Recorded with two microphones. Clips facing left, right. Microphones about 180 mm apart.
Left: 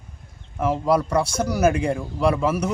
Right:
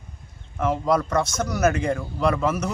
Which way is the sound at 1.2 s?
30° left (ahead or behind).